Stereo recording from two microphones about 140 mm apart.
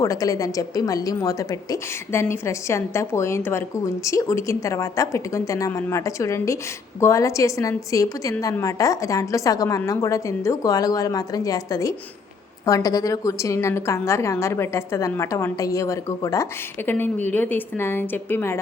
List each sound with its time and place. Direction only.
0.0 s a woman's voice: 25° left (ahead or behind)